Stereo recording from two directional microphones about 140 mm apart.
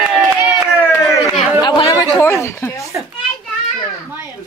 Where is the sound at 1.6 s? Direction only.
35° left (ahead or behind).